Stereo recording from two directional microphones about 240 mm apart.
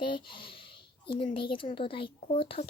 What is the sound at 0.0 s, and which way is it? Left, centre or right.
Speech, centre.